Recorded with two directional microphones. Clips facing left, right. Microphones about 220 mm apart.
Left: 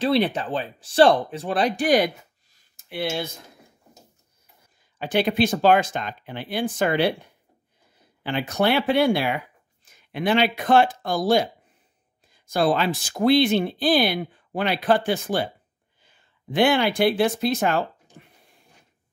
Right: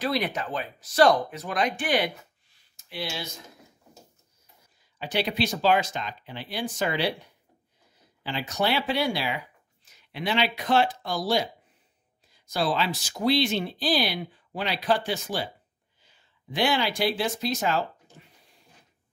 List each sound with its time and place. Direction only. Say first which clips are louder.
0.0 s speech: left 6 dB; 30° left (ahead or behind); by 3.3 s 55° left (ahead or behind)
4.9 s speech: left 6 dB; 50° left (ahead or behind)
8.2 s speech: left 5 dB; 55° left (ahead or behind)
18.2 s a sound: left 4 dB; 55° left (ahead or behind)